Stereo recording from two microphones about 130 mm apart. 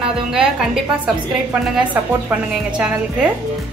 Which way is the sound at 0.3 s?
5° right (ahead or behind).